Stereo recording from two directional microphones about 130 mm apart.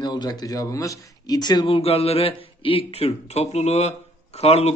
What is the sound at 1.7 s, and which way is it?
A man's voice, 50° left (ahead or behind).